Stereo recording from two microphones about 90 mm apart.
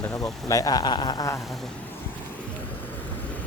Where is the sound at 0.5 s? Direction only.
45° left (ahead or behind).